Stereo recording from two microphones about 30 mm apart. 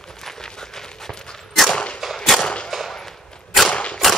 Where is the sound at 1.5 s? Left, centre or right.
Centre.